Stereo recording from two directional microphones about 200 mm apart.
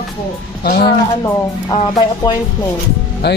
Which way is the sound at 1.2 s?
20° left (ahead or behind).